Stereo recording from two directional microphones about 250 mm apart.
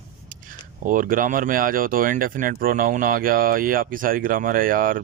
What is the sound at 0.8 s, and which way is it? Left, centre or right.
Speech, right.